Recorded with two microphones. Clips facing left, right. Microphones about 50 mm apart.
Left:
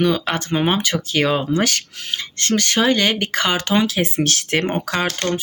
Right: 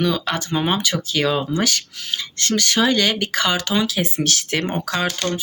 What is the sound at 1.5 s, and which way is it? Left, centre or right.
Speech, left.